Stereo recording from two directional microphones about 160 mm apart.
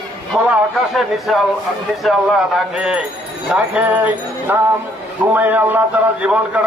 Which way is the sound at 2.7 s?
5° right (ahead or behind).